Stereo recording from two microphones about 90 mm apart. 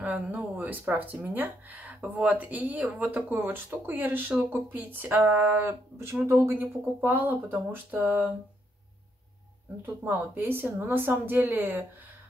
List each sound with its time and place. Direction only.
0.0 s speech: 15° right (ahead or behind)
10.0 s speech: 25° right (ahead or behind)